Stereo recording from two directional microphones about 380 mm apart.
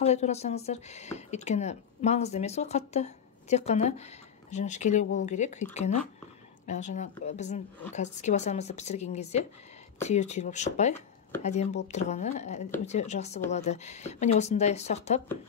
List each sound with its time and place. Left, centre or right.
0.0 s speech: centre